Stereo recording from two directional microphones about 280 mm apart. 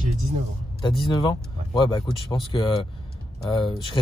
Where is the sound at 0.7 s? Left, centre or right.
Centre.